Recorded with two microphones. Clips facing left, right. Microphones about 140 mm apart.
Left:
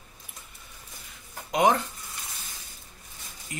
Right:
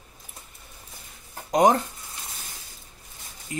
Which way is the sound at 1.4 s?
40° right (ahead or behind).